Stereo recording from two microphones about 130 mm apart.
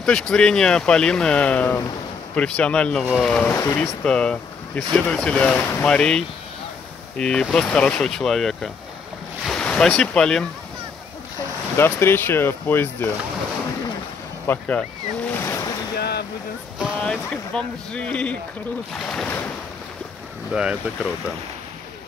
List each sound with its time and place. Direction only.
0.0 s speech: 5° left (ahead or behind)
3.5 s speech: 20° left (ahead or behind)
3.8 s speech: 5° left (ahead or behind)
11.7 s speech: 20° left (ahead or behind)
14.5 s speech: 15° left (ahead or behind)
17.0 s speech: 5° left (ahead or behind)
20.5 s speech: 5° right (ahead or behind)